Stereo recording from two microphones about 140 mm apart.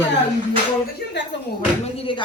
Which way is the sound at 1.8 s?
40° left (ahead or behind).